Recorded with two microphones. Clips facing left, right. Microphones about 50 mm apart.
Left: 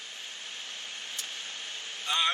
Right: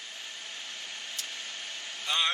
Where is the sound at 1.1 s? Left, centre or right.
Left.